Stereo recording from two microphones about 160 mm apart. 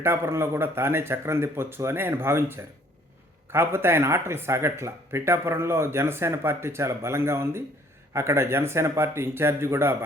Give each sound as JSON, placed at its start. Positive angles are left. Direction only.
{"t": 0.0, "sound": "speech", "side_deg": -15}